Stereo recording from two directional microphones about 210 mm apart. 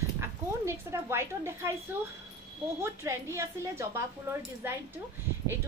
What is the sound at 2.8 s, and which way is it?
A woman's voice, 10° right (ahead or behind).